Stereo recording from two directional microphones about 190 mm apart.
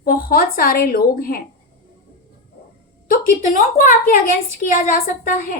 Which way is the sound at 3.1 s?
45° left (ahead or behind).